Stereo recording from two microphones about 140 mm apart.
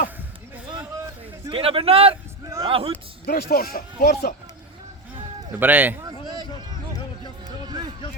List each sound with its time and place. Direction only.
1.5 s a man's voice: 40° right (ahead or behind)
3.2 s speech: 90° left
5.5 s speech: 15° right (ahead or behind)
6.0 s a sound: 30° right (ahead or behind)